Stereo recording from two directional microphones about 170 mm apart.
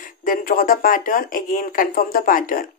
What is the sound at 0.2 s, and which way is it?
Speech, 55° left (ahead or behind).